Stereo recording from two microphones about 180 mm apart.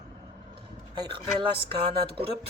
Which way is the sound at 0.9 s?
25° right (ahead or behind).